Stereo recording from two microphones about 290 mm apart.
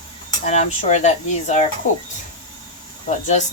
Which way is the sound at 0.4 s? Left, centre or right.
Left.